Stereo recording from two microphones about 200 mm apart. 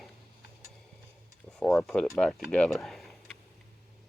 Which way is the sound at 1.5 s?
5° left (ahead or behind).